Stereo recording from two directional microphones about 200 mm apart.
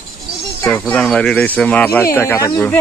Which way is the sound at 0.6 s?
5° left (ahead or behind).